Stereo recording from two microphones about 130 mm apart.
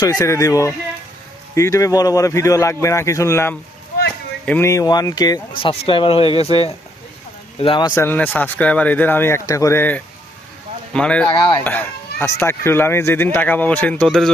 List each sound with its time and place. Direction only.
0.0 s speech: 30° left (ahead or behind)
5.5 s speech: 45° left (ahead or behind)
7.6 s speech: 40° left (ahead or behind)
7.9 s speech: 15° left (ahead or behind)
11.3 s speech: 35° left (ahead or behind)
11.6 s speech: 15° left (ahead or behind)